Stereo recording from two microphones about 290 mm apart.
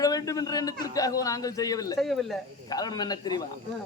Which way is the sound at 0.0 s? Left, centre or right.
Centre.